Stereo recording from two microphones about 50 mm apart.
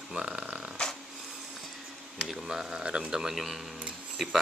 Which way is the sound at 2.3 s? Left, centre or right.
Centre.